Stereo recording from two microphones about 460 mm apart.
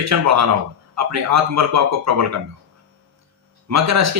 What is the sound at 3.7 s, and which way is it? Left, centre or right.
Speech, right.